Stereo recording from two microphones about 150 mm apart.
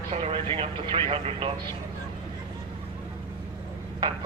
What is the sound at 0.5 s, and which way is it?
Speech, 35° right (ahead or behind).